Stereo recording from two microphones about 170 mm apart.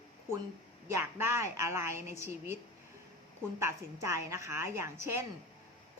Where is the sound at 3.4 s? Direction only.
15° right (ahead or behind).